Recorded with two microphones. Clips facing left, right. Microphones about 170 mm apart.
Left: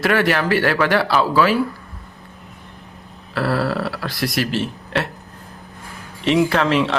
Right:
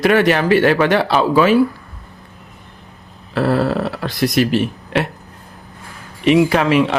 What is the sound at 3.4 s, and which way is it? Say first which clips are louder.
Speech: right 4 dB; 20° right (ahead or behind).